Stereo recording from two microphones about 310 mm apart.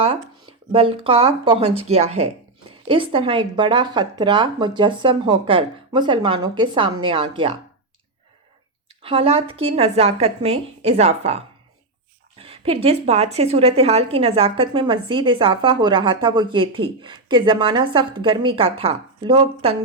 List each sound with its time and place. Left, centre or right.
0.7 s a woman's voice: centre
9.0 s a woman's voice: centre